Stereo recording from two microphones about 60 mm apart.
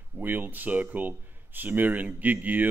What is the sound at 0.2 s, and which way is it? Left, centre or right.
Speech, right.